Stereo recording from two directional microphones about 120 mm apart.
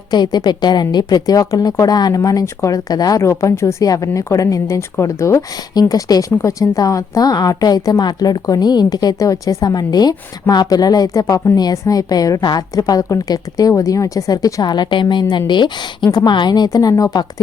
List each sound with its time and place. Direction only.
0.1 s a woman's voice: 35° left (ahead or behind)